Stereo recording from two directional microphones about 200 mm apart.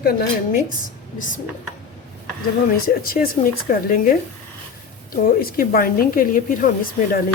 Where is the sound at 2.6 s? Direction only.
45° left (ahead or behind).